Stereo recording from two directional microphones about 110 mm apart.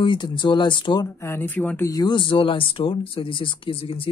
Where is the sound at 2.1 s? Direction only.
50° left (ahead or behind).